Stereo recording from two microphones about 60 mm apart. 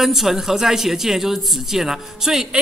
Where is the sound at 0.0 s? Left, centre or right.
Centre.